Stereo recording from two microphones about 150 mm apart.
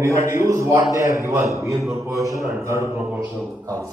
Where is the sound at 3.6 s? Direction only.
20° right (ahead or behind).